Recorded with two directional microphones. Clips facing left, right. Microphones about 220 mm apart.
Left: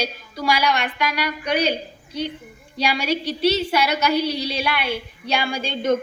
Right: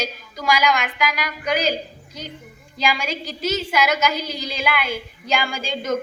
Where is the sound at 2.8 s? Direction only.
35° left (ahead or behind).